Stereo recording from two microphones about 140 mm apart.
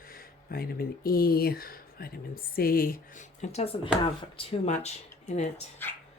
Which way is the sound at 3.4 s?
50° left (ahead or behind).